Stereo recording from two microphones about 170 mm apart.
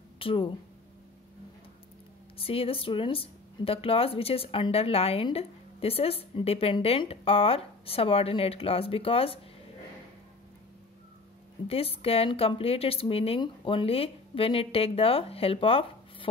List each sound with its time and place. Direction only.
0.2 s speech: 30° left (ahead or behind)
2.3 s a woman's voice: 35° left (ahead or behind)
11.6 s a woman's voice: 35° left (ahead or behind)